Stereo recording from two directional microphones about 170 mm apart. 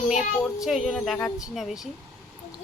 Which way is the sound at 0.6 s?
Centre (ahead or behind).